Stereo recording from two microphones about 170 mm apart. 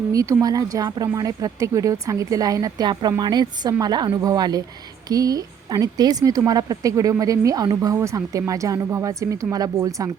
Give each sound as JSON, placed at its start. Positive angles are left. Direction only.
{"t": 0.1, "sound": "speech", "side_deg": -20}